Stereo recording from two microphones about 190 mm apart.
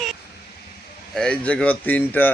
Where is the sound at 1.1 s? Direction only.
5° left (ahead or behind).